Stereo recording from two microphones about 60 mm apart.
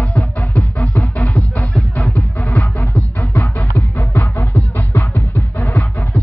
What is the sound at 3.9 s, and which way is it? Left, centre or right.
Music, left.